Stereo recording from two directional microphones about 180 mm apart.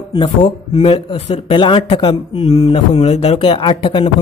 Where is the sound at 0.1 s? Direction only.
30° left (ahead or behind).